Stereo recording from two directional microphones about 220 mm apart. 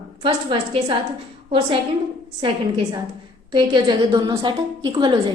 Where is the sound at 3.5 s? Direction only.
20° right (ahead or behind).